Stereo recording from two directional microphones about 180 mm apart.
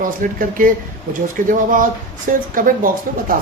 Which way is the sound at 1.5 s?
50° right (ahead or behind).